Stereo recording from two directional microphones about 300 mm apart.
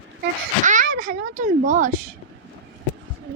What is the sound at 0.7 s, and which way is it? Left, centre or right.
Speech, right.